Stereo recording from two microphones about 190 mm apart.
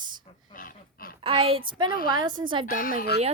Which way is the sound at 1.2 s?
30° right (ahead or behind).